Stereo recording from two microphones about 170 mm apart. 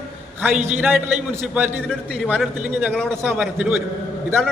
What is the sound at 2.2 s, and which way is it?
Speech, 5° right (ahead or behind).